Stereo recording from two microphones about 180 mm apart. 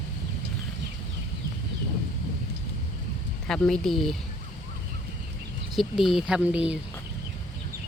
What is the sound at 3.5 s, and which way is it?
Speech, 5° left (ahead or behind).